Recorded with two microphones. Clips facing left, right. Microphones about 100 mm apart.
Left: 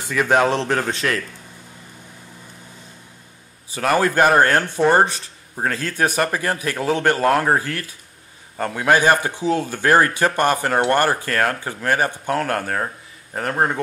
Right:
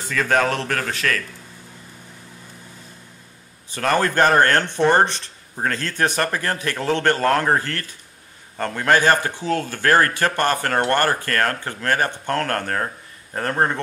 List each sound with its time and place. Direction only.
0.0 s speech: 15° left (ahead or behind)
3.7 s speech: 10° left (ahead or behind)